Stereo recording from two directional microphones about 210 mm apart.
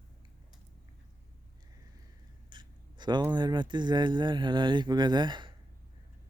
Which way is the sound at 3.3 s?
20° right (ahead or behind).